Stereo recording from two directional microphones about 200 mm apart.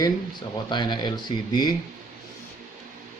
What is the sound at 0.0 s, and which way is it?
Speech, 20° left (ahead or behind).